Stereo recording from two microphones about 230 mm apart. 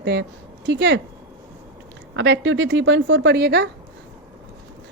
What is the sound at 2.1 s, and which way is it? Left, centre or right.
A woman's voice, right.